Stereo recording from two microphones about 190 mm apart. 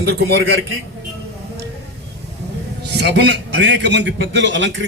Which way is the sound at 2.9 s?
65° right (ahead or behind).